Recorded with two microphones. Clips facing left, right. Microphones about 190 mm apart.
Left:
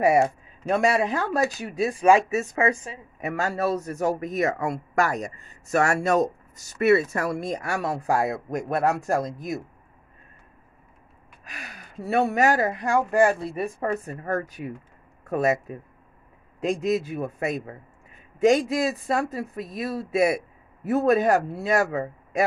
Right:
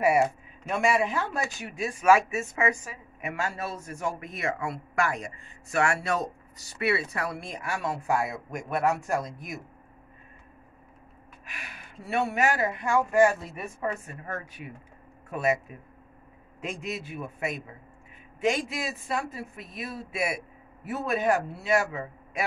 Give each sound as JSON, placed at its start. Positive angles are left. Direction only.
{"t": 0.0, "sound": "speech", "side_deg": 35}
{"t": 11.4, "sound": "speech", "side_deg": 40}